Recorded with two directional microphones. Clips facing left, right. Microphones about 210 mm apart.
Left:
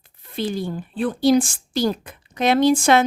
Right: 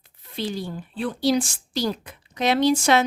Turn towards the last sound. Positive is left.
turn(degrees=50)  # may be behind; listen again after turning